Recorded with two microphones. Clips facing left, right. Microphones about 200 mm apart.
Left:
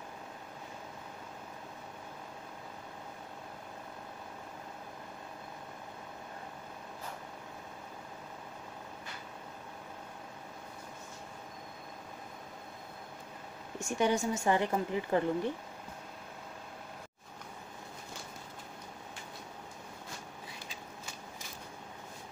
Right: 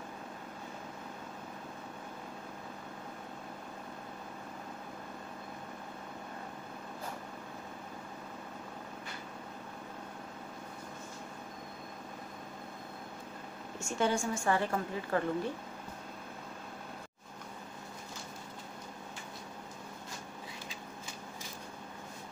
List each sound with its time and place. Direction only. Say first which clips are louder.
13.7 s a woman's voice: left 2 dB; 15° left (ahead or behind)